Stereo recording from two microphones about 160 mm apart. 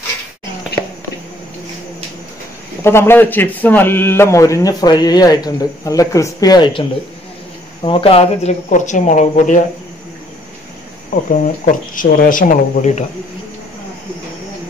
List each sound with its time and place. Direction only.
0.7 s a sound: 90° left
2.8 s a man's voice: 15° left (ahead or behind); by 9.6 s 50° left (ahead or behind)
11.4 s speech: 55° left (ahead or behind)